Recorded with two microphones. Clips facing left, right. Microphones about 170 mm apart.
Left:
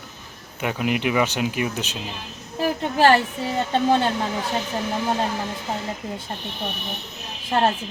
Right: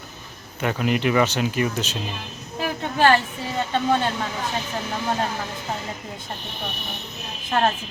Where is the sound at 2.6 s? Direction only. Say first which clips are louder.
Left 2 dB; 35° left (ahead or behind).